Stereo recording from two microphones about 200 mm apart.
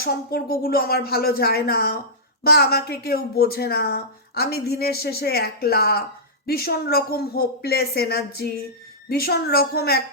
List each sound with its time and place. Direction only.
0.0 s speech: 50° left (ahead or behind)